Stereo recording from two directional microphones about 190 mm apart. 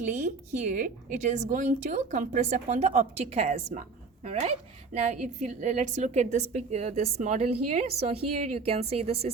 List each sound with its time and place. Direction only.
0.0 s a woman's voice: 40° right (ahead or behind)